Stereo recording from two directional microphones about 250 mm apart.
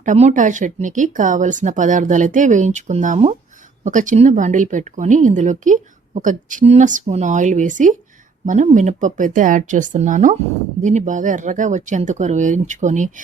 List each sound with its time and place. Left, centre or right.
0.0 s a woman's voice: right